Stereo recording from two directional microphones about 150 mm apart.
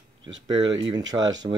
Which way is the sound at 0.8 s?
25° right (ahead or behind).